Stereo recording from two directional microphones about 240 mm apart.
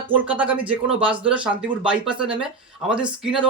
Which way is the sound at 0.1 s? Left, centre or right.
Centre.